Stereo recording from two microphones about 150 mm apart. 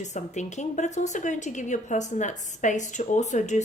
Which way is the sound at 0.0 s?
50° left (ahead or behind).